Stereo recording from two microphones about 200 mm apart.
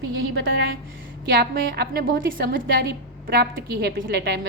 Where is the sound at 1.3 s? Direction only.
55° right (ahead or behind).